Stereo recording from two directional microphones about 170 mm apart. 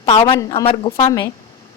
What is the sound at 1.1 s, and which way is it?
Speech, 20° left (ahead or behind).